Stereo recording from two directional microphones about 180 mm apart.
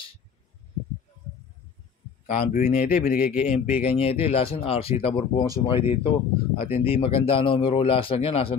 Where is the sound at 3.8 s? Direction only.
35° left (ahead or behind).